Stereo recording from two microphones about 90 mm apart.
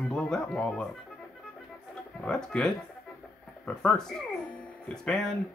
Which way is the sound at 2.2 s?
5° left (ahead or behind).